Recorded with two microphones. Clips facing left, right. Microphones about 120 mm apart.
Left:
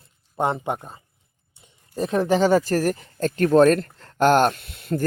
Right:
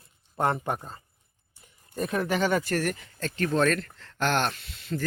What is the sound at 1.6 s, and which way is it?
Speech, 30° left (ahead or behind).